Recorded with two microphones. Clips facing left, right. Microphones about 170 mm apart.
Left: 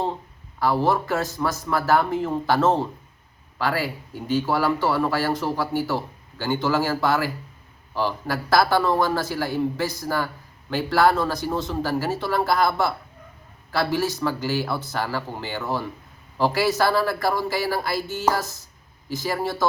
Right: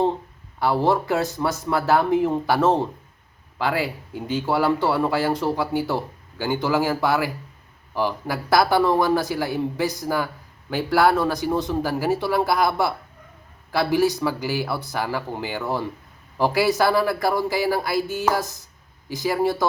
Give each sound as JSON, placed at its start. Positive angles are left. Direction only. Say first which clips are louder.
{"t": 0.6, "sound": "speech", "louder": "right 1 dB", "side_deg": -15}